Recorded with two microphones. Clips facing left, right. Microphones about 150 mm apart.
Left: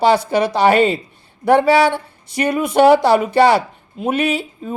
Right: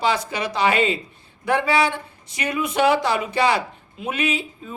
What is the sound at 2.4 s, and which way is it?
Speech, 60° left (ahead or behind).